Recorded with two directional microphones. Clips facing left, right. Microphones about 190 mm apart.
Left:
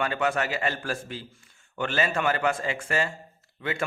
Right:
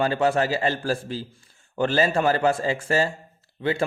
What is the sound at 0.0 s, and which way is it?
A man's voice, 30° right (ahead or behind).